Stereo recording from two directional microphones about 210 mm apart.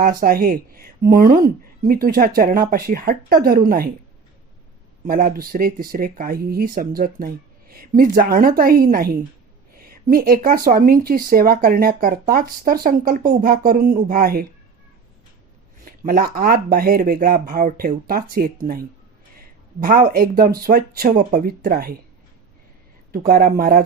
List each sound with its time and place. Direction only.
0.2 s speech: 45° right (ahead or behind)
5.0 s speech: 45° right (ahead or behind)
15.8 s speech: 45° right (ahead or behind)
19.8 s speech: 45° right (ahead or behind)
23.1 s speech: 45° right (ahead or behind)